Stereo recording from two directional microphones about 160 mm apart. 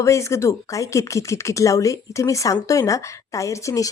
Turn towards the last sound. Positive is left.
turn(degrees=20)  # may be behind; listen again after turning